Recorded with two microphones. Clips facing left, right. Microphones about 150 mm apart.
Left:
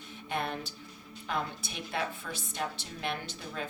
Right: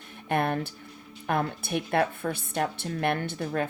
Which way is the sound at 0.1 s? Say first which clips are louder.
Right 8 dB; 55° right (ahead or behind).